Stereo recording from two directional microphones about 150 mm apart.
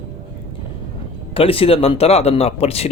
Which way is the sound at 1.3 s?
40° left (ahead or behind).